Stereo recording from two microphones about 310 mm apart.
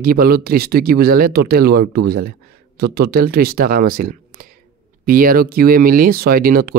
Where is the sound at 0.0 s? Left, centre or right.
Right.